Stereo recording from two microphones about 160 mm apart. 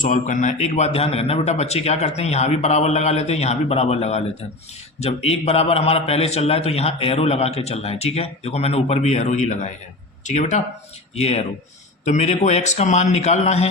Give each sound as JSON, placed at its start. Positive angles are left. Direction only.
{"t": 0.0, "sound": "a man's voice", "side_deg": 50}